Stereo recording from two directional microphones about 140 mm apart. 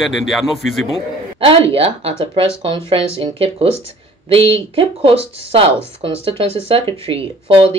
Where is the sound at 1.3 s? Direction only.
40° right (ahead or behind).